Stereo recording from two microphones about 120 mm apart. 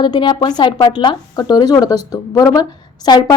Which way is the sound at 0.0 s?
40° left (ahead or behind).